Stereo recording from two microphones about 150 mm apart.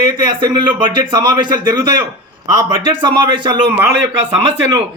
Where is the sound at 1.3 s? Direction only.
30° right (ahead or behind).